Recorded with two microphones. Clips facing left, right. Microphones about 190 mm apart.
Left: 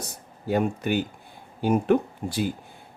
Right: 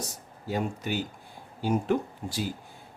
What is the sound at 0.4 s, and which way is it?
Speech, 60° left (ahead or behind).